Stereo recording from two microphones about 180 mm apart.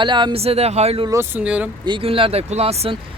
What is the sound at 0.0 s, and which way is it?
Speech, 25° right (ahead or behind).